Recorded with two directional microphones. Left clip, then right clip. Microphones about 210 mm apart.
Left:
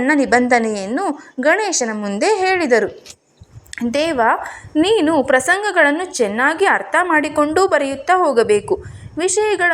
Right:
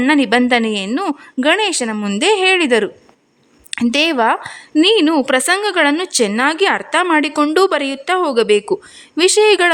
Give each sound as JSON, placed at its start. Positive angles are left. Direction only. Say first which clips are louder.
{"t": 0.0, "sound": "a woman's voice", "louder": "right 1 dB", "side_deg": -45}
{"t": 3.7, "sound": "a woman's voice", "louder": "right 3 dB", "side_deg": -30}